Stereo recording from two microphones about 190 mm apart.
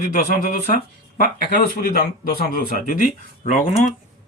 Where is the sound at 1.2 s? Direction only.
50° left (ahead or behind).